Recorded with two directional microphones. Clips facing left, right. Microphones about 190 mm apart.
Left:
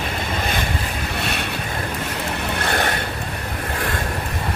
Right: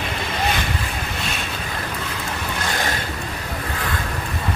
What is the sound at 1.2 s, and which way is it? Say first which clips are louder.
Boat: left 6 dB; 60° left (ahead or behind).